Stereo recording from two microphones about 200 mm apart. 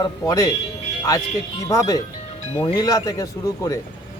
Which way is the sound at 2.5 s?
35° left (ahead or behind).